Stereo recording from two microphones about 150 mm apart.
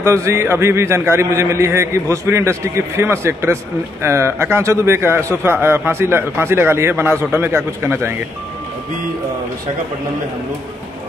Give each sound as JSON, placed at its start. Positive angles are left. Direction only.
{"t": 0.0, "sound": "a man's voice", "side_deg": -20}